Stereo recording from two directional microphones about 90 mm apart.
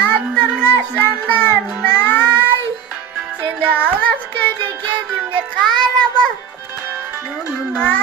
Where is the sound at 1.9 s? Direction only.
20° left (ahead or behind).